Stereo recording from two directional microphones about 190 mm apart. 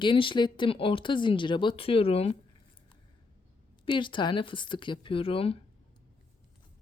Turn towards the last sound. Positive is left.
turn(degrees=30)  # may be behind; listen again after turning